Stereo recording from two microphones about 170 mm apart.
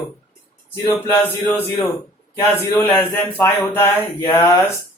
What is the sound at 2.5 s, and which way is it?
A man's voice, 15° left (ahead or behind).